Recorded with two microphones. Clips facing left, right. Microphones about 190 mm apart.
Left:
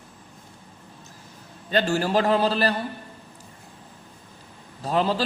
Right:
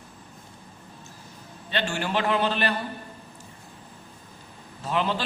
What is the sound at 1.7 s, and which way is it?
Speech, 35° left (ahead or behind).